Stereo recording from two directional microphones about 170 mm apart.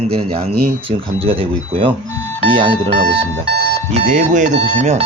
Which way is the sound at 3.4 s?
70° right (ahead or behind).